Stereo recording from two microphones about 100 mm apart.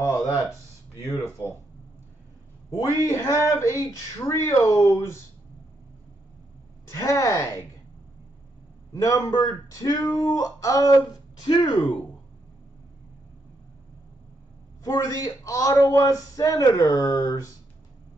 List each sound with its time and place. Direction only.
0.0 s speech: 25° left (ahead or behind)
2.7 s speech: 35° left (ahead or behind)
6.9 s speech: 30° left (ahead or behind)
8.9 s speech: 35° left (ahead or behind)
11.4 s speech: 45° left (ahead or behind)
14.8 s speech: 35° left (ahead or behind)